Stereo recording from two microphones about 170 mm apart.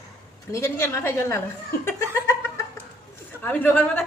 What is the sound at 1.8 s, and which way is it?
Cat, 15° left (ahead or behind).